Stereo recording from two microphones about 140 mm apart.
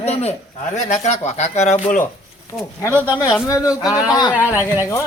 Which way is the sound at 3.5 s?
25° left (ahead or behind).